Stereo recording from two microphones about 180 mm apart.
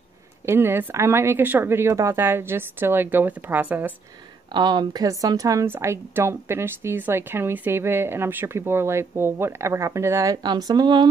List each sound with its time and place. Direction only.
0.5 s a woman's voice: 15° right (ahead or behind)
4.6 s a woman's voice: 25° right (ahead or behind)